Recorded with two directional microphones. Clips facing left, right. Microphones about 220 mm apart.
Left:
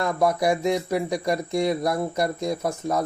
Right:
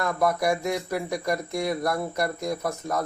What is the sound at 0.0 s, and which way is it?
Speech, 25° left (ahead or behind).